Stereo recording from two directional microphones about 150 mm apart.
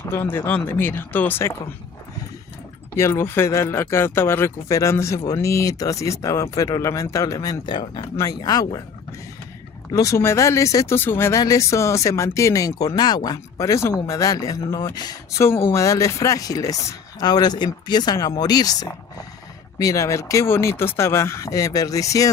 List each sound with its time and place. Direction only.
0.0 s speech: 15° left (ahead or behind)
2.9 s speech: 20° left (ahead or behind)
9.9 s speech: 20° left (ahead or behind)